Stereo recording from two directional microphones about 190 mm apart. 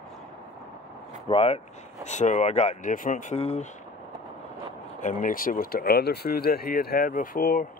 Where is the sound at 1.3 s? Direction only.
30° left (ahead or behind).